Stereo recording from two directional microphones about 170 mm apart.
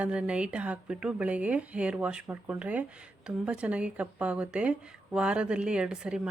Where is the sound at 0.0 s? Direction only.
5° right (ahead or behind).